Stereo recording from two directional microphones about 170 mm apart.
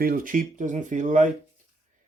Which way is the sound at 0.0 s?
55° right (ahead or behind).